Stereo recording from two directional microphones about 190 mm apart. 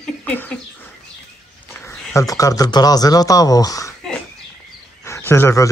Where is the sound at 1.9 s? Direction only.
15° left (ahead or behind).